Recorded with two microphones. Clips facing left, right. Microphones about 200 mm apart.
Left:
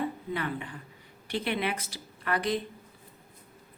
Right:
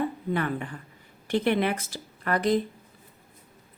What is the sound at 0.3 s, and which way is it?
Speech, 50° right (ahead or behind).